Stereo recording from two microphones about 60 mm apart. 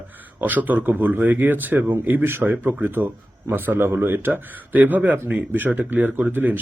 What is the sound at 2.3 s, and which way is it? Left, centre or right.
Speech, right.